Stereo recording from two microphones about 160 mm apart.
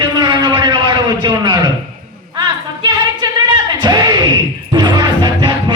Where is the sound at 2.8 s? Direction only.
25° right (ahead or behind).